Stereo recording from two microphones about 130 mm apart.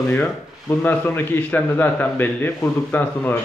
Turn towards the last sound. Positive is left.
turn(degrees=15)  # may be behind; listen again after turning